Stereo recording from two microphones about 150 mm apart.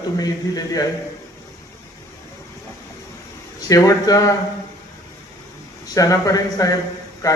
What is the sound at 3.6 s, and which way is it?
Speech, 25° left (ahead or behind).